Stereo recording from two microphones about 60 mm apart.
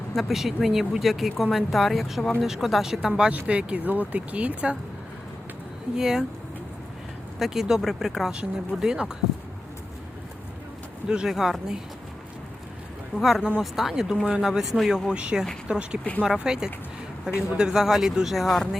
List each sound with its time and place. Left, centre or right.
0.1 s speech: centre
3.2 s speech: centre
6.0 s speech: centre
7.3 s speech: centre
11.1 s speech: centre
13.1 s speech: centre